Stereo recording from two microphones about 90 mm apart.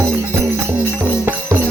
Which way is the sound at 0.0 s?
30° right (ahead or behind).